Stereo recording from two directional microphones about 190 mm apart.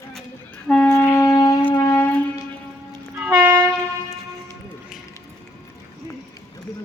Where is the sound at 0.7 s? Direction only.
10° left (ahead or behind).